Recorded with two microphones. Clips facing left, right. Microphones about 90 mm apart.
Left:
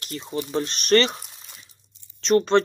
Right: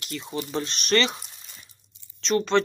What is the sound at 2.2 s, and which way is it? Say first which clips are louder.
Speech: left 4 dB; 40° left (ahead or behind).